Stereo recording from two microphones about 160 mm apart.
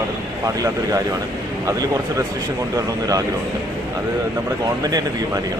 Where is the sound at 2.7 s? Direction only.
20° right (ahead or behind).